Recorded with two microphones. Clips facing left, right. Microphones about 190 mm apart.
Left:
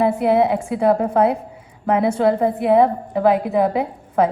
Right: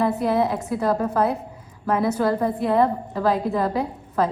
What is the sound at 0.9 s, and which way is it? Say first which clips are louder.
A woman's voice: left 5 dB; 25° left (ahead or behind).